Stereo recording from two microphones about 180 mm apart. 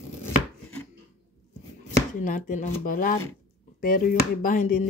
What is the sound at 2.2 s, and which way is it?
Speech, 45° left (ahead or behind).